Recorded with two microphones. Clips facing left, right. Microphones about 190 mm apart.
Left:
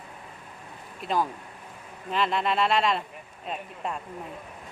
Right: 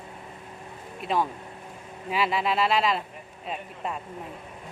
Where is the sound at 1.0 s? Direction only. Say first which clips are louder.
Right 1 dB; centre (ahead or behind).